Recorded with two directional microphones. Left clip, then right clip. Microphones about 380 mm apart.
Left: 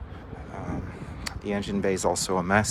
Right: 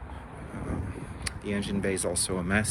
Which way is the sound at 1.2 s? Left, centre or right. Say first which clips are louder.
Left 3 dB; centre.